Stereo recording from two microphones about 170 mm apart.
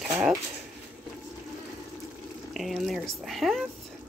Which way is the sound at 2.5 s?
Centre (ahead or behind).